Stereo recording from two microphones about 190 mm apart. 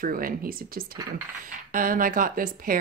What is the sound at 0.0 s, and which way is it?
Speech, 50° right (ahead or behind).